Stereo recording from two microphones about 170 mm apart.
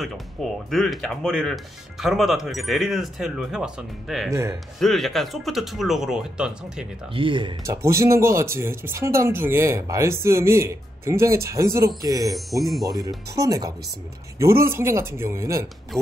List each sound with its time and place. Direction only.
0.0 s speech: centre (ahead or behind)
4.3 s speech: 15° right (ahead or behind)
4.7 s speech: centre (ahead or behind)
7.2 s speech: 30° right (ahead or behind)
7.6 s speech: 15° right (ahead or behind)
12.4 s speech: centre (ahead or behind)
12.8 s speech: 20° right (ahead or behind)